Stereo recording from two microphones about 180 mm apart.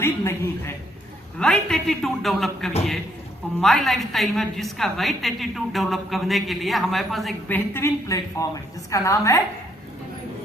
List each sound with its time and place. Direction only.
0.0 s a woman's voice: 15° left (ahead or behind)
7.5 s a woman's voice: 15° left (ahead or behind)